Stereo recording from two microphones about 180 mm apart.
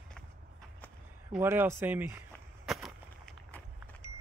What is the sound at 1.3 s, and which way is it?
Speech, 10° right (ahead or behind).